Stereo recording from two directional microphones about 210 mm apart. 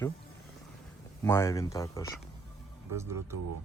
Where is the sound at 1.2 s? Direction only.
10° left (ahead or behind).